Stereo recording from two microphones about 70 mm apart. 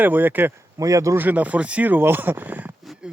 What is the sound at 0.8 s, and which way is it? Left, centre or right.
Speech, right.